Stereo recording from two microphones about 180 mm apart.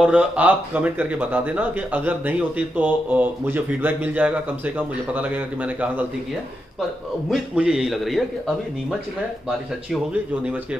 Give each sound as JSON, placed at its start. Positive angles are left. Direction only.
{"t": 0.0, "sound": "speech", "side_deg": -5}
{"t": 7.2, "sound": "a man's voice", "side_deg": -5}
{"t": 10.4, "sound": "speech", "side_deg": -5}